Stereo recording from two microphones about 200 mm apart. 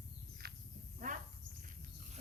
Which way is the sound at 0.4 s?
50° right (ahead or behind).